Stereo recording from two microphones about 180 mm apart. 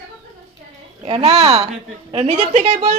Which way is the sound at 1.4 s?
20° right (ahead or behind).